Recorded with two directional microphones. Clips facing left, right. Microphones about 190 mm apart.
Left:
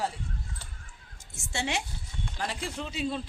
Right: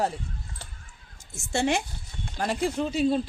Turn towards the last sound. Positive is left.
turn(degrees=-40)  # may be behind; listen again after turning